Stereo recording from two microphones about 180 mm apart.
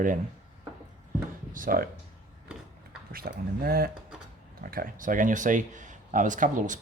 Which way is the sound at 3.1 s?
55° right (ahead or behind).